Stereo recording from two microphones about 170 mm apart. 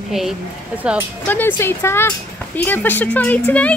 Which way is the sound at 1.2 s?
10° left (ahead or behind).